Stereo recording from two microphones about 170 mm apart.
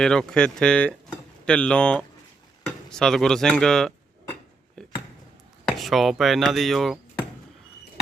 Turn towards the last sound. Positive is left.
turn(degrees=0)  # may be behind; listen again after turning